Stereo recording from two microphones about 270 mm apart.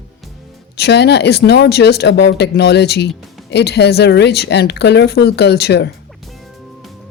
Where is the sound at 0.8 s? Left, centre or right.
Left.